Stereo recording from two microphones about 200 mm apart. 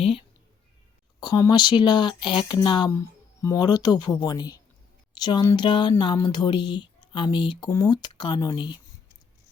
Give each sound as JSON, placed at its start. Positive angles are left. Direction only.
{"t": 0.0, "sound": "speech", "side_deg": 30}